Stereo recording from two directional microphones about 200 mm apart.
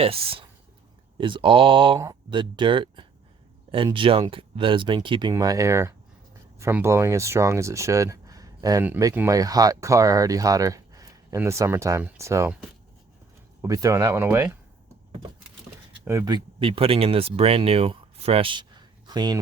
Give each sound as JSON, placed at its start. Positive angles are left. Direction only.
{"t": 0.0, "sound": "speech", "side_deg": -30}
{"t": 13.6, "sound": "speech", "side_deg": -15}
{"t": 16.0, "sound": "speech", "side_deg": -15}